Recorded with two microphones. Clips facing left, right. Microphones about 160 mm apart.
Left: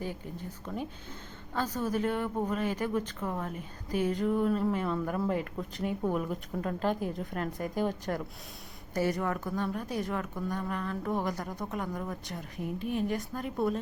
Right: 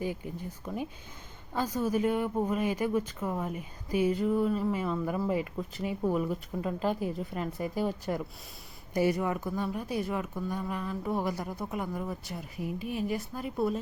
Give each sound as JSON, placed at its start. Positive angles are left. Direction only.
{"t": 0.0, "sound": "speech", "side_deg": -10}